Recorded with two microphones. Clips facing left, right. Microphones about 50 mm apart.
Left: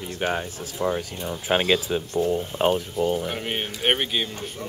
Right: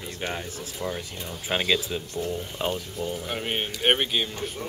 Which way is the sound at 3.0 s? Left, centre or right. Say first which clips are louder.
Left 8 dB; left.